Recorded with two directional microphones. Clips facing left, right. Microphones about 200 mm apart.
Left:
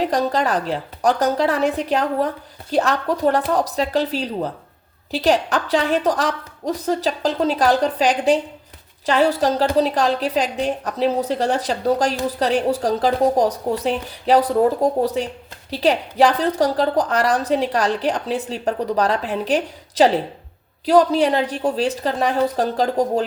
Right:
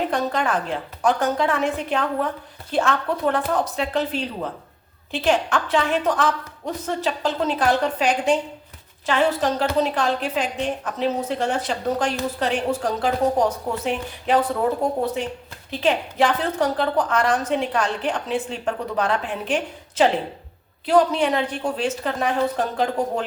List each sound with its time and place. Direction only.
0.0 s a woman's voice: 35° left (ahead or behind)